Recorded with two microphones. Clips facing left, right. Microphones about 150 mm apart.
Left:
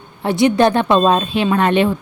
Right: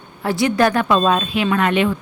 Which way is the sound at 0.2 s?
20° left (ahead or behind).